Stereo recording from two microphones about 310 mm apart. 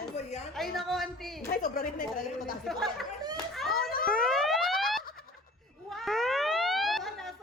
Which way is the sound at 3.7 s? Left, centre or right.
Left.